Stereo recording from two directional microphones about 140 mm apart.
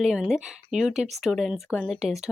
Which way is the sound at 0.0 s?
5° right (ahead or behind).